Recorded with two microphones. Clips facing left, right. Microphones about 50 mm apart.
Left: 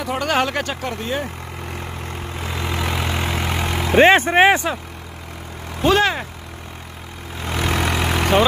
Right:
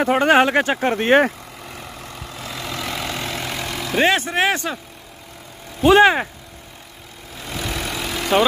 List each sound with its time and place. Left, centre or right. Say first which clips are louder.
0.0 s speech: right 6 dB; right
1.0 s speech: right 12 dB; right
2.3 s vehicle: left 3 dB; left
5.9 s speech: right 5 dB; right
7.4 s vehicle: left 5 dB; left